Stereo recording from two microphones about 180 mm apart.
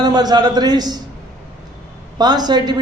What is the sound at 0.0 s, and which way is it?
A man's voice, 25° right (ahead or behind).